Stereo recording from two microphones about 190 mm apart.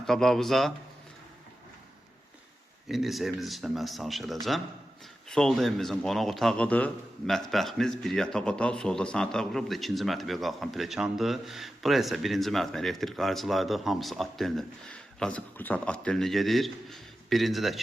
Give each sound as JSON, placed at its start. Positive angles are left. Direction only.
{"t": 0.0, "sound": "a man's voice", "side_deg": 0}
{"t": 2.9, "sound": "a man's voice", "side_deg": 0}